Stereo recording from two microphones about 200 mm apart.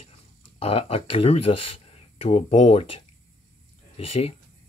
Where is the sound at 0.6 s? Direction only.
30° left (ahead or behind).